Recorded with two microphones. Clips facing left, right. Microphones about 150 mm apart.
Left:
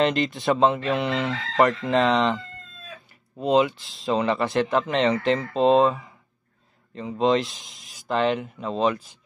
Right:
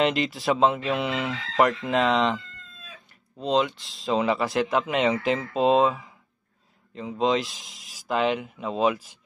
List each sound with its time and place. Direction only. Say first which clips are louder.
0.0 s speech: left 1 dB; 5° right (ahead or behind)